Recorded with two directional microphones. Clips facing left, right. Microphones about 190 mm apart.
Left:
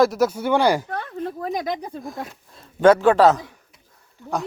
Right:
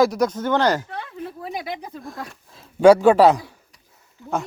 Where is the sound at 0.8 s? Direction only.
50° left (ahead or behind).